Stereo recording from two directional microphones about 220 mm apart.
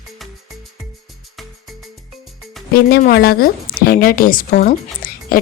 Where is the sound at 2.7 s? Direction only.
45° left (ahead or behind).